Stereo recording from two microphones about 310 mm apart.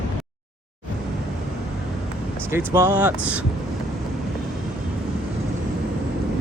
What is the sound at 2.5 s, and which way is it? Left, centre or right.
Speech, centre.